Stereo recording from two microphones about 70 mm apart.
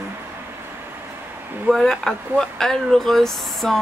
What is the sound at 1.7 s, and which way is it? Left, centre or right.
Speech, centre.